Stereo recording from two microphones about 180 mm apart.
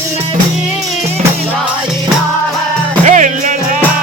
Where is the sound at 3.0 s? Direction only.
45° right (ahead or behind).